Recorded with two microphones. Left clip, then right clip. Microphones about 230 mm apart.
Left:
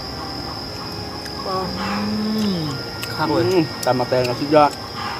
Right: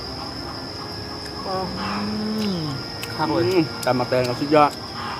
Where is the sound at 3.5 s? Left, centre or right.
Centre.